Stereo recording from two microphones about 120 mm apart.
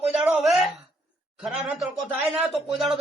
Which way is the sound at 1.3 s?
5° right (ahead or behind).